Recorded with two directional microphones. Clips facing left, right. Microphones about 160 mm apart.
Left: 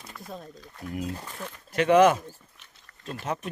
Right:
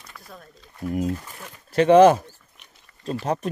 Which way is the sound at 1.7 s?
30° right (ahead or behind).